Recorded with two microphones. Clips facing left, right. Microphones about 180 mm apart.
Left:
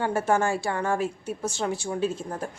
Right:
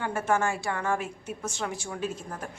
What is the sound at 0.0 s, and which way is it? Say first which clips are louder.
A woman's voice: left 3 dB; 35° left (ahead or behind).